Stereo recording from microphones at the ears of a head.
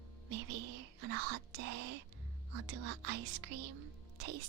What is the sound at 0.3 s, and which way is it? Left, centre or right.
Whispering, right.